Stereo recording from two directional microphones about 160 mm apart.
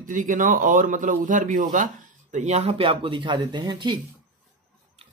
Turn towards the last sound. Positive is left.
turn(degrees=-30)  # may be behind; listen again after turning